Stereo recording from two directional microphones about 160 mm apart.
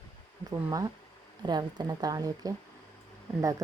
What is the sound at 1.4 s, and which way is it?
A woman's voice, 25° right (ahead or behind).